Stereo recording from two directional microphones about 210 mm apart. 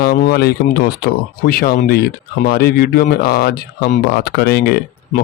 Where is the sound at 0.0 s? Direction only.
45° left (ahead or behind).